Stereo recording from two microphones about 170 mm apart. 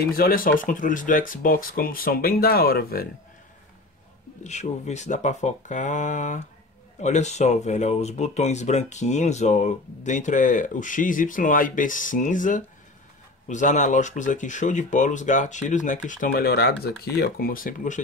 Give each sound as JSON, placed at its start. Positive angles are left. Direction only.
{"t": 0.1, "sound": "speech", "side_deg": 60}
{"t": 4.4, "sound": "speech", "side_deg": 40}
{"t": 16.3, "sound": "speech", "side_deg": 65}